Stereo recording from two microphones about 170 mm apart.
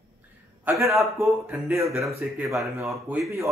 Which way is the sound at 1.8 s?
Centre (ahead or behind).